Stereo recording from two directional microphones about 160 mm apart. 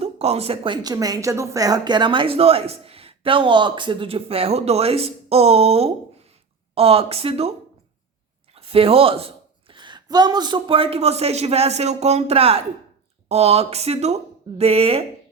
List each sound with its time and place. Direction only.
0.0 s a woman's voice: 40° right (ahead or behind)
8.5 s a woman's voice: 35° right (ahead or behind)